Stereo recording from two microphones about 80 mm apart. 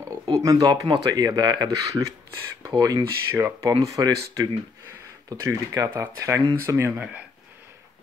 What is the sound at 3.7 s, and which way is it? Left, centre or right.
Speech, right.